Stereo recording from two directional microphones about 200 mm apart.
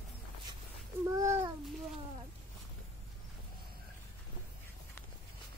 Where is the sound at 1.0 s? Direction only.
15° right (ahead or behind).